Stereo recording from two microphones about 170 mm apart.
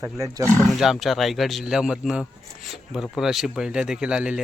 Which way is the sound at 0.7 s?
Centre (ahead or behind).